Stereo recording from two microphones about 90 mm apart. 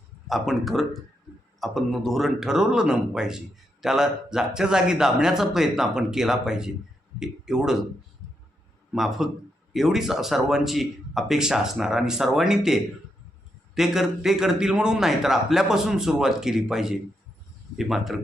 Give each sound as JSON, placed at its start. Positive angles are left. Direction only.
{"t": 0.3, "sound": "speech", "side_deg": 0}
{"t": 8.9, "sound": "speech", "side_deg": 0}